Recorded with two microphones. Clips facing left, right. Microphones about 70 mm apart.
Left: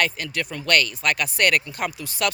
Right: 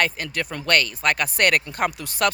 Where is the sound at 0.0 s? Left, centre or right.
Right.